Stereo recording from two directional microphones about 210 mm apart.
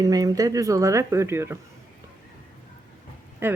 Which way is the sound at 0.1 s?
15° right (ahead or behind).